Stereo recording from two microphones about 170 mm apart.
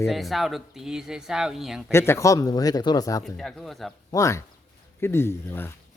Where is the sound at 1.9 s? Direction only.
15° left (ahead or behind).